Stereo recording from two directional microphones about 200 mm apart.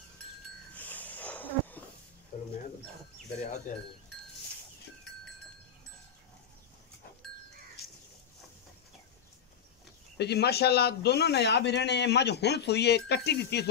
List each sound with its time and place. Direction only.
0.7 s wheeze: 10° left (ahead or behind)
10.1 s a man's voice: 55° left (ahead or behind)